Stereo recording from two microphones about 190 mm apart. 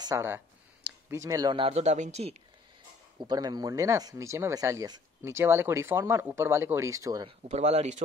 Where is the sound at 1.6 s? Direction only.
35° right (ahead or behind).